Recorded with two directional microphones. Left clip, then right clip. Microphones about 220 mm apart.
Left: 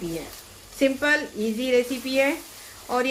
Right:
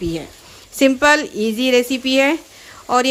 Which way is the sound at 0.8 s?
50° right (ahead or behind).